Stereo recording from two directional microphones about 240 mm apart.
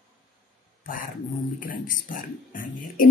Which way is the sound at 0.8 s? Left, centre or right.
Left.